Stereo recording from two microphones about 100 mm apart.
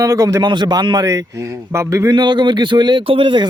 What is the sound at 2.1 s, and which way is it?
Speech, 50° right (ahead or behind).